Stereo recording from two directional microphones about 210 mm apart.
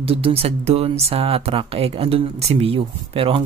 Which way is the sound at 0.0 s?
25° right (ahead or behind).